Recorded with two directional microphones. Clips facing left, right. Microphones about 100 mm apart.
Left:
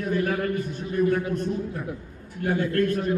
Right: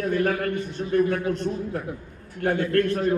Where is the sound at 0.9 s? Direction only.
65° right (ahead or behind).